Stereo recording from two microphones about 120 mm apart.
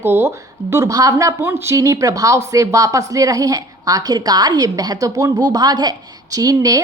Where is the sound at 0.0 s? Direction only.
20° right (ahead or behind).